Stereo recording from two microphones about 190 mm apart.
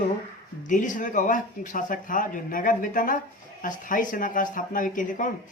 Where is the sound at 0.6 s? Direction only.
45° left (ahead or behind).